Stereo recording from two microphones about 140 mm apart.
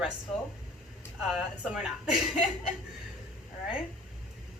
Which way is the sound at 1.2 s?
5° right (ahead or behind).